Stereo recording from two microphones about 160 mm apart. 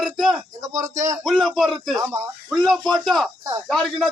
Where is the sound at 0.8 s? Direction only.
50° right (ahead or behind).